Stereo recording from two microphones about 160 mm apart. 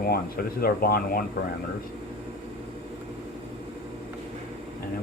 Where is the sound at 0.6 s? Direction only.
70° left (ahead or behind).